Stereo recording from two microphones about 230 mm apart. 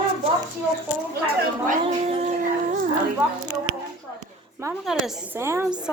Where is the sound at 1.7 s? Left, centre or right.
Right.